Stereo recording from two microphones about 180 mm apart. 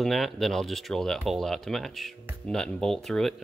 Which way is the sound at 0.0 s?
Centre (ahead or behind).